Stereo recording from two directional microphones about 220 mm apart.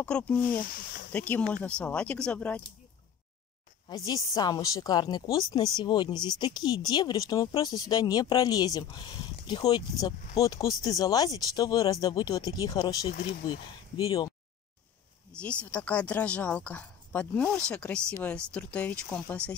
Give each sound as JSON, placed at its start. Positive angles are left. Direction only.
{"t": 0.0, "sound": "speech", "side_deg": 5}
{"t": 0.6, "sound": "speech", "side_deg": 40}
{"t": 1.1, "sound": "speech", "side_deg": 5}
{"t": 3.9, "sound": "speech", "side_deg": 15}
{"t": 15.3, "sound": "speech", "side_deg": 5}